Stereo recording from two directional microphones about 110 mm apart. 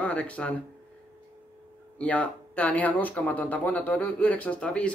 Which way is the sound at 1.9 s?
15° left (ahead or behind).